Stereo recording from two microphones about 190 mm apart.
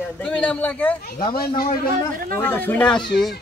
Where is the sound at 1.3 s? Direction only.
50° left (ahead or behind).